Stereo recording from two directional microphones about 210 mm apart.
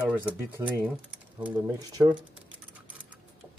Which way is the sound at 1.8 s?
20° right (ahead or behind).